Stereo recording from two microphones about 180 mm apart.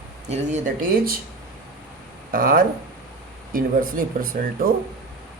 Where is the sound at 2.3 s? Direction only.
50° right (ahead or behind).